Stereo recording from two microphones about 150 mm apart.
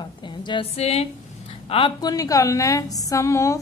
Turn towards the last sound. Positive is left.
turn(degrees=20)  # may be behind; listen again after turning